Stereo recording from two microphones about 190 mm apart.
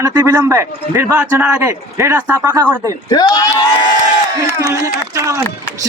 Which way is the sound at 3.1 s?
20° left (ahead or behind).